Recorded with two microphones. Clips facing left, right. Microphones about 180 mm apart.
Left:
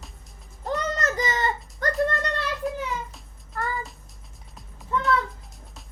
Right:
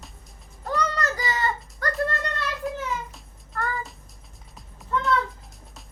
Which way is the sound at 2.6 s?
Centre (ahead or behind).